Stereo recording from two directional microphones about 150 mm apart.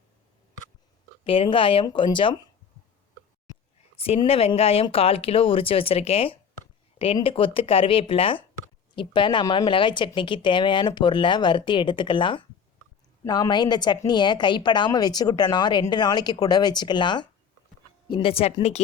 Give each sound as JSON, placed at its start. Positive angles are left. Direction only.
{"t": 1.2, "sound": "speech", "side_deg": 35}
{"t": 4.2, "sound": "a woman's voice", "side_deg": 40}